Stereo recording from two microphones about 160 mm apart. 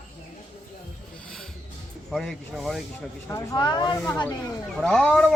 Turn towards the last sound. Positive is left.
turn(degrees=0)  # may be behind; listen again after turning